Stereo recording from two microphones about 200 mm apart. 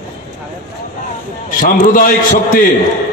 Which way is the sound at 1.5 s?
40° left (ahead or behind).